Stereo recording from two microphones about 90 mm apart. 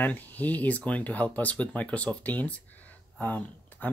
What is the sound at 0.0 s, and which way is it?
Speech, 20° left (ahead or behind).